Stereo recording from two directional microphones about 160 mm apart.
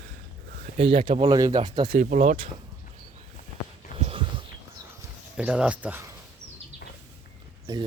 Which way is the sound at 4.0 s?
40° right (ahead or behind).